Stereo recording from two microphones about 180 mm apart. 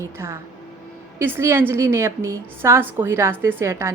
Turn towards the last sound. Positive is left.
turn(degrees=-15)  # may be behind; listen again after turning